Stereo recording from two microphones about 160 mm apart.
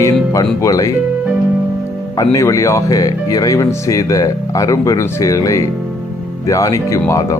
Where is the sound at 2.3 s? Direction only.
20° left (ahead or behind).